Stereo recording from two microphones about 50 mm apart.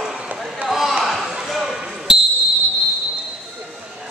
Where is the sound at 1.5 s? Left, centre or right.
Centre.